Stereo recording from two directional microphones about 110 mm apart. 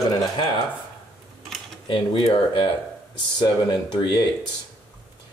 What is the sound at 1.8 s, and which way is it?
Speech, 50° left (ahead or behind).